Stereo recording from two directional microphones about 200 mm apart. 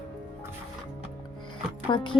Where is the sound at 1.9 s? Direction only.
25° left (ahead or behind).